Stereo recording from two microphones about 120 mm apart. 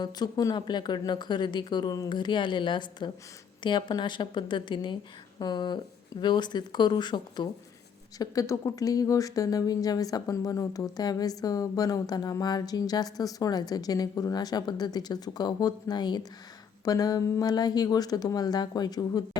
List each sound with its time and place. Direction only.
0.0 s a woman's voice: 35° left (ahead or behind)
8.2 s a woman's voice: 30° left (ahead or behind)